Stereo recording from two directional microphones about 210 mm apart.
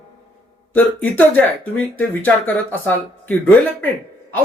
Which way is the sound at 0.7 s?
5° left (ahead or behind).